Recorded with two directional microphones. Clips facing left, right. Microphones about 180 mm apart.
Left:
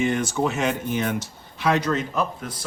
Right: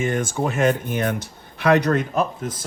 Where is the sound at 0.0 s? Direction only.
50° right (ahead or behind).